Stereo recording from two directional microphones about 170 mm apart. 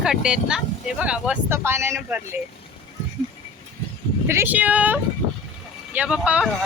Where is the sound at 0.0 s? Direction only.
5° right (ahead or behind).